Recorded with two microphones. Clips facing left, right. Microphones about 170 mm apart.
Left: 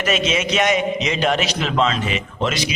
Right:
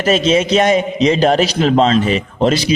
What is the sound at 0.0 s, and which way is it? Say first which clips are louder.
A man's voice: right 7 dB; 30° right (ahead or behind).